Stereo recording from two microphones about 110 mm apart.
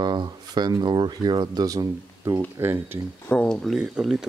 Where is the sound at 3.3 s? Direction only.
10° left (ahead or behind).